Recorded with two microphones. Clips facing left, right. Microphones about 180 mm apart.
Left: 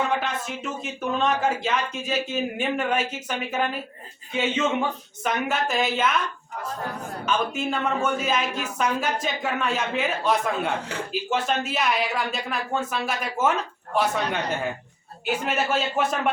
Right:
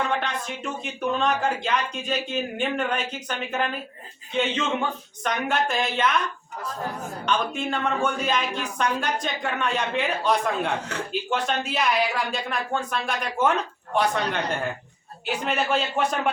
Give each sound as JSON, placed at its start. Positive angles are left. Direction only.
{"t": 0.1, "sound": "speech", "side_deg": 5}
{"t": 7.3, "sound": "speech", "side_deg": 5}